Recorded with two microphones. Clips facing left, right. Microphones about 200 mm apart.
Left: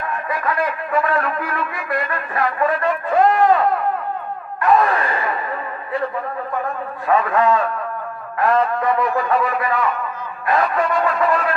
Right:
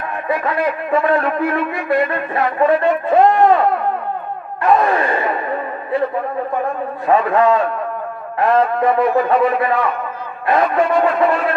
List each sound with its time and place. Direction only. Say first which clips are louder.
0.3 s a man's voice: right 5 dB; 25° right (ahead or behind)
4.6 s battle cry: right 2 dB; 25° right (ahead or behind)
7.1 s a man's voice: right 3 dB; 30° right (ahead or behind)